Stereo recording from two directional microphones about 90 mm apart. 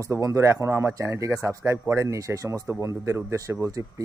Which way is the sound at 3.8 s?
20° right (ahead or behind).